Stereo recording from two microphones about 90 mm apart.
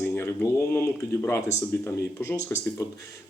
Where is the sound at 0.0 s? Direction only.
20° left (ahead or behind).